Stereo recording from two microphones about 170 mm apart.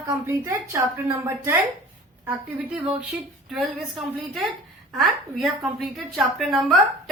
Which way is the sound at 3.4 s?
Centre (ahead or behind).